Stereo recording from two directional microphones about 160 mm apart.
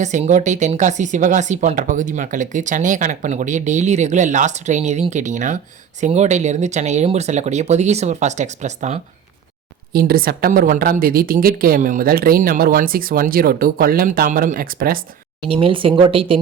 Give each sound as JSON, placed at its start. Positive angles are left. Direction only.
{"t": 0.0, "sound": "speech", "side_deg": -50}
{"t": 9.9, "sound": "a woman's voice", "side_deg": -70}
{"t": 15.4, "sound": "speech", "side_deg": -35}